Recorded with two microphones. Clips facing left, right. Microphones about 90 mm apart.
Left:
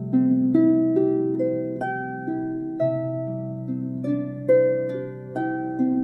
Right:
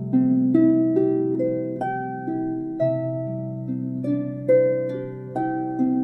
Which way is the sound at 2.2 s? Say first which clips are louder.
Right 1 dB; 20° left (ahead or behind).